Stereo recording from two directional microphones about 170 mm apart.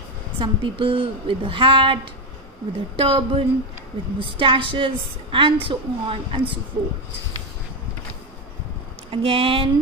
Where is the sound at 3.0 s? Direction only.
30° right (ahead or behind).